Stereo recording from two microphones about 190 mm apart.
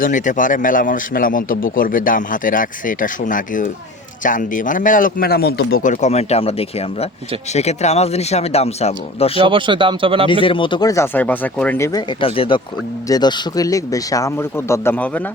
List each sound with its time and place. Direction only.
0.0 s a man's voice: 45° left (ahead or behind)
9.4 s a man's voice: 25° right (ahead or behind)
10.4 s speech: 25° left (ahead or behind); by 11.9 s 10° left (ahead or behind)
11.9 s speech: 25° left (ahead or behind); by 15.2 s 10° left (ahead or behind)